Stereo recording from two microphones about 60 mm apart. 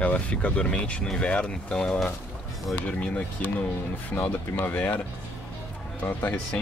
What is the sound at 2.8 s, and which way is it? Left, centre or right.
Speech, left.